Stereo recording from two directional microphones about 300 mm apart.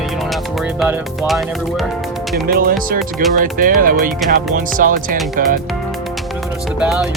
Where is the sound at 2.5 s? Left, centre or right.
Right.